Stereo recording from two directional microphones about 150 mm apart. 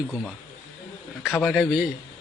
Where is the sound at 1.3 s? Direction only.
Centre (ahead or behind).